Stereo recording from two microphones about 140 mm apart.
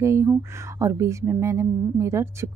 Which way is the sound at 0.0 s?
20° right (ahead or behind).